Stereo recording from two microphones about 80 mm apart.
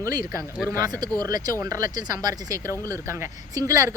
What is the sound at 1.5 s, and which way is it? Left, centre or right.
Speech, right.